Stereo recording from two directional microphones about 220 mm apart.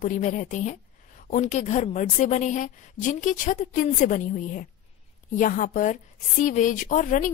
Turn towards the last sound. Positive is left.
turn(degrees=35)  # may be behind; listen again after turning